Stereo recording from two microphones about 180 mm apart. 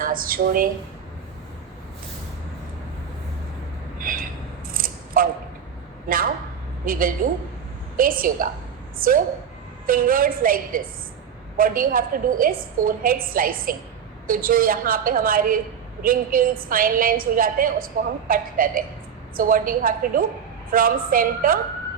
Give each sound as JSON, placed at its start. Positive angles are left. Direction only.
{"t": 0.0, "sound": "speech", "side_deg": -50}
{"t": 3.9, "sound": "a sound", "side_deg": -50}
{"t": 4.7, "sound": "scissors", "side_deg": -50}
{"t": 6.1, "sound": "a woman's voice", "side_deg": -50}